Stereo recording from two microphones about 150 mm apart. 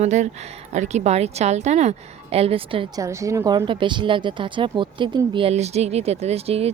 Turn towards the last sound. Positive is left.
turn(degrees=-40)  # may be behind; listen again after turning